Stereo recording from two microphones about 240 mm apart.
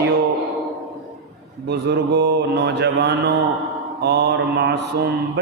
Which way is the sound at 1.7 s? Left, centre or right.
Right.